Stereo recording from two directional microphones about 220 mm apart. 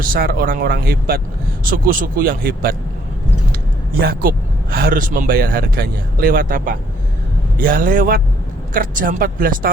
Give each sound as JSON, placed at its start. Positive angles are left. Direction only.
{"t": 0.0, "sound": "speech", "side_deg": -40}
{"t": 4.0, "sound": "speech", "side_deg": -40}